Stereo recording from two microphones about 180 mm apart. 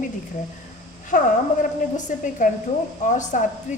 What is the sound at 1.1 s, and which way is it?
A woman's voice, 45° left (ahead or behind).